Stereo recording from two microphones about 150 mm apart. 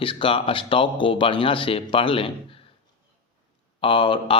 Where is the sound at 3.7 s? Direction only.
35° left (ahead or behind).